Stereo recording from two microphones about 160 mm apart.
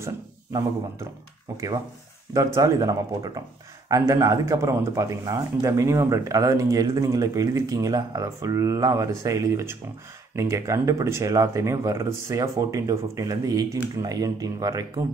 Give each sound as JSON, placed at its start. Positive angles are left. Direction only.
{"t": 0.0, "sound": "speech", "side_deg": -20}